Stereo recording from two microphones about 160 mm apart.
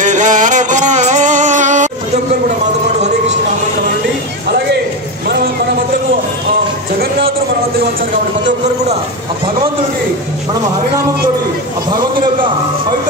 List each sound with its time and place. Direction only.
0.0 s music: 50° right (ahead or behind)